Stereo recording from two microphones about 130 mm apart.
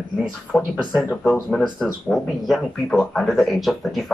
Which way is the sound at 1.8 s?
Centre (ahead or behind).